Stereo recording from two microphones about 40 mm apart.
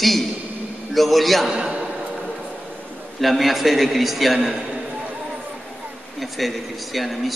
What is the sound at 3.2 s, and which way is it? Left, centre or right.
A man's voice, centre.